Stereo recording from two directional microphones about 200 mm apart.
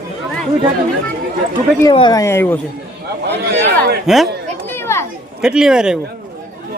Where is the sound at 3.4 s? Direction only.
55° right (ahead or behind).